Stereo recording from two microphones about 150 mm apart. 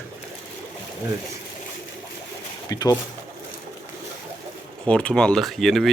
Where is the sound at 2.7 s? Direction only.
25° left (ahead or behind).